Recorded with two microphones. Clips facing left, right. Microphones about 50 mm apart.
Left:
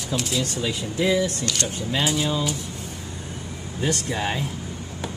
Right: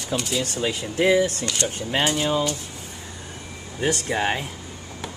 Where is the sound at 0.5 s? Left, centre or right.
Right.